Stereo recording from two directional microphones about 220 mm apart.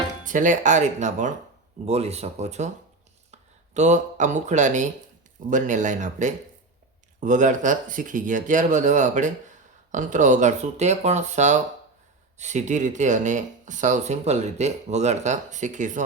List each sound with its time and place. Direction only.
0.3 s speech: 35° right (ahead or behind)